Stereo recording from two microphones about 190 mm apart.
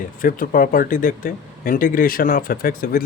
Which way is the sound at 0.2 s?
45° left (ahead or behind).